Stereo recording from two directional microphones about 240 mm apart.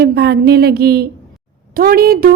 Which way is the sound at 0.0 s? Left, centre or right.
Right.